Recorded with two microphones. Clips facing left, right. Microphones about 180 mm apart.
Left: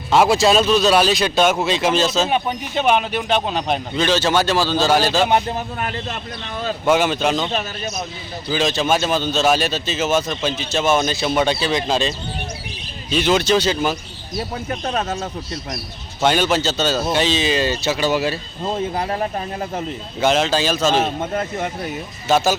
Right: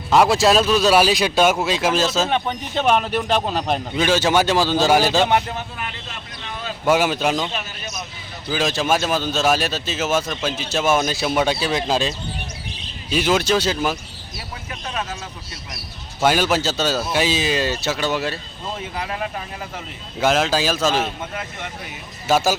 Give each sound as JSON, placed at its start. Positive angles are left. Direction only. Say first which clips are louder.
{"t": 0.1, "sound": "a man's voice", "louder": "left 1 dB", "side_deg": 0}
{"t": 2.3, "sound": "a man's voice", "louder": "left 1 dB", "side_deg": 5}
{"t": 3.9, "sound": "speech", "louder": "even", "side_deg": -10}
{"t": 5.3, "sound": "speech", "louder": "left 2 dB", "side_deg": 35}
{"t": 6.8, "sound": "a man's voice", "louder": "left 1 dB", "side_deg": -5}
{"t": 14.3, "sound": "speech", "louder": "left 10 dB", "side_deg": 45}
{"t": 16.2, "sound": "a man's voice", "louder": "left 1 dB", "side_deg": -5}
{"t": 18.9, "sound": "speech", "louder": "left 5 dB", "side_deg": 35}
{"t": 20.1, "sound": "a man's voice", "louder": "left 1 dB", "side_deg": 0}
{"t": 21.0, "sound": "speech", "louder": "left 6 dB", "side_deg": 45}
{"t": 22.3, "sound": "speech", "louder": "left 1 dB", "side_deg": -5}